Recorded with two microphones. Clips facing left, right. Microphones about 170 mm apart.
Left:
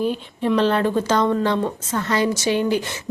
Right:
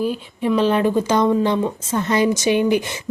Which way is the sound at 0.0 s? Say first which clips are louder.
Right 1 dB; 5° right (ahead or behind).